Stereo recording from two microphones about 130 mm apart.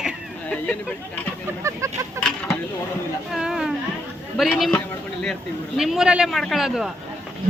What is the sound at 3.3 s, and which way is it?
Speech, 5° right (ahead or behind).